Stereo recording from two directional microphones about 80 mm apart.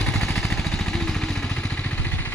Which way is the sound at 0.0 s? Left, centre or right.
Centre.